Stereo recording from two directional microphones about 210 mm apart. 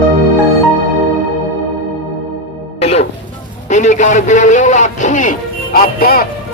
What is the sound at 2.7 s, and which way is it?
Music, 30° left (ahead or behind).